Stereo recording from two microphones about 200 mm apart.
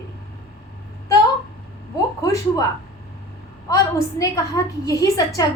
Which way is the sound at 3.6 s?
15° left (ahead or behind).